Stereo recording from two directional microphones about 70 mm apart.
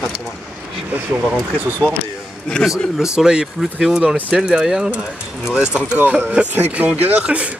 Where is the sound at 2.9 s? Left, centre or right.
Centre.